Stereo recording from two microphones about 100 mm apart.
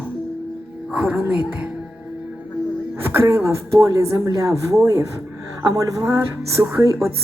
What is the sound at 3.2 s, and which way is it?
A man's voice, 30° right (ahead or behind).